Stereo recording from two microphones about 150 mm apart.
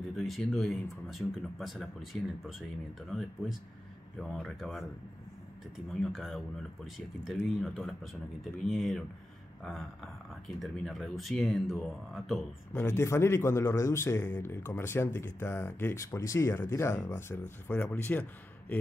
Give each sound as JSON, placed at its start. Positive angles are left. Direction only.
{"t": 0.1, "sound": "speech", "side_deg": 0}
{"t": 6.1, "sound": "speech", "side_deg": 0}
{"t": 9.6, "sound": "a sound", "side_deg": 0}
{"t": 10.6, "sound": "speech", "side_deg": 0}
{"t": 12.7, "sound": "a man's voice", "side_deg": 15}